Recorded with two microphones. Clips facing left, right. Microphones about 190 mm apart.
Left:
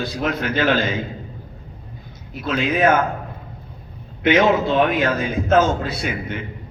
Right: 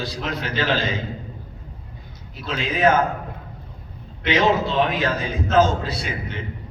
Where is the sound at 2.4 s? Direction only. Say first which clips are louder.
Left 2 dB; 55° left (ahead or behind).